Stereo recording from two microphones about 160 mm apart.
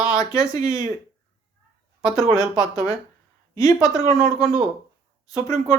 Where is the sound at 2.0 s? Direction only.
5° right (ahead or behind).